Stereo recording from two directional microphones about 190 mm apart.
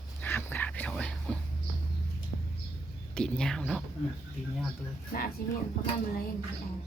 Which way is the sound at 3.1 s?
5° left (ahead or behind).